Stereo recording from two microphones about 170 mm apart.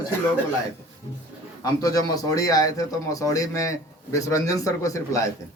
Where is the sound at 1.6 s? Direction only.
20° left (ahead or behind).